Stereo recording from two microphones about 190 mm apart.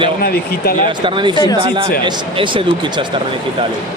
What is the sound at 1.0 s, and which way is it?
Speech, 25° right (ahead or behind).